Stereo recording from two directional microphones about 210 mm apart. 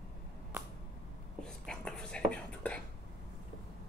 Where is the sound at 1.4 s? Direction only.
5° left (ahead or behind).